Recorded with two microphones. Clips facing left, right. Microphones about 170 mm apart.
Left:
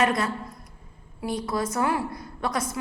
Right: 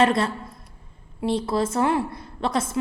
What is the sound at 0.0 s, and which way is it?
A woman's voice, 30° right (ahead or behind).